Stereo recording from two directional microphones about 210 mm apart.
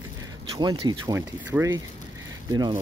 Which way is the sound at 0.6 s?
20° right (ahead or behind).